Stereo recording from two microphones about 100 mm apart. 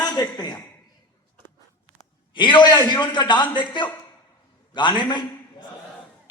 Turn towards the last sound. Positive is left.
turn(degrees=50)  # may be behind; listen again after turning